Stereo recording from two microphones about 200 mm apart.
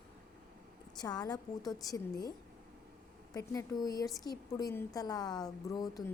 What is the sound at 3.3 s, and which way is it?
A woman's voice, 15° left (ahead or behind).